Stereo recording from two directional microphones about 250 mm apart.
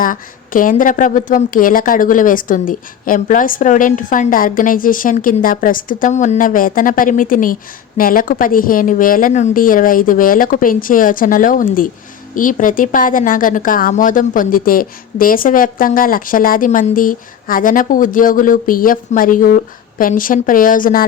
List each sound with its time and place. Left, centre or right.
0.0 s a woman's voice: left